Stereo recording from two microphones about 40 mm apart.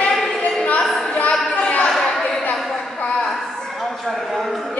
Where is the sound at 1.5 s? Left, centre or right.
Left.